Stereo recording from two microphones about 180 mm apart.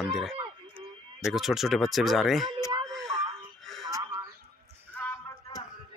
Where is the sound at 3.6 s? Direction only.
Centre (ahead or behind).